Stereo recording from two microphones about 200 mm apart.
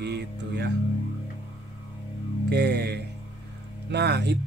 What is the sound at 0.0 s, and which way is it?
Speech, 55° right (ahead or behind).